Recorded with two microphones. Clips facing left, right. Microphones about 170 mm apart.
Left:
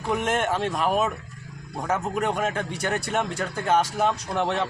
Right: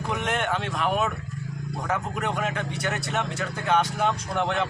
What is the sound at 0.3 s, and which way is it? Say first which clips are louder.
Speech: left 1 dB; 40° left (ahead or behind).